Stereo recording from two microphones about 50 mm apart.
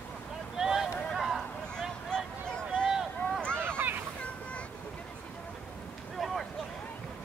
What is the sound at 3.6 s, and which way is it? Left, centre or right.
Boat, right.